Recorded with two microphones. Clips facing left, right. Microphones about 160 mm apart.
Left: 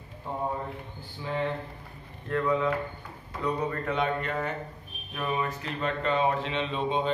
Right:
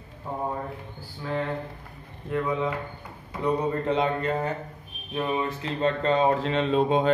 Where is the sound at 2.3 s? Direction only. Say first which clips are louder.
Left 1 dB; 20° right (ahead or behind).